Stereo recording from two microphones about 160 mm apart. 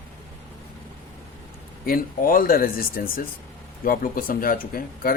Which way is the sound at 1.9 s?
60° left (ahead or behind).